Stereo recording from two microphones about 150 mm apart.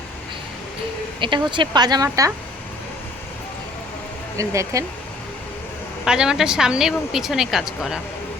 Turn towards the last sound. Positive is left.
turn(degrees=0)  # may be behind; listen again after turning